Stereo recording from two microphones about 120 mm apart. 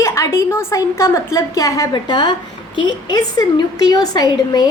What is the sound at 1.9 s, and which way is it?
A woman's voice, 40° left (ahead or behind).